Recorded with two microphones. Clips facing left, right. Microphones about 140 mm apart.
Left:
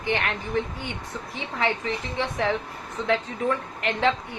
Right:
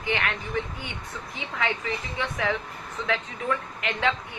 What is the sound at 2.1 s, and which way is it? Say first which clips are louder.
Speech: left 3 dB; 30° left (ahead or behind).